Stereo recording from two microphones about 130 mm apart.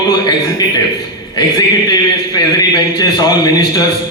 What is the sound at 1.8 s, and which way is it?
A man's voice, 30° left (ahead or behind).